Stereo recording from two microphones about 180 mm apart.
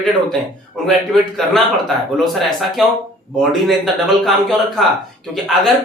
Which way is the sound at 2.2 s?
Centre (ahead or behind).